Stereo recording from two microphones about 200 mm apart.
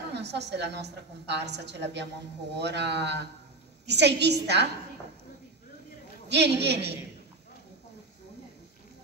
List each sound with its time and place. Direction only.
0.1 s a woman's voice: 55° right (ahead or behind)
6.2 s a woman's voice: 55° right (ahead or behind)